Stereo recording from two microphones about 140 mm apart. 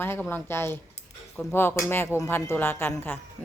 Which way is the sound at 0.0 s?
15° left (ahead or behind).